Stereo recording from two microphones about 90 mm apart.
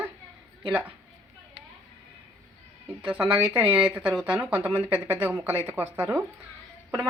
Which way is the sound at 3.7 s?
15° right (ahead or behind).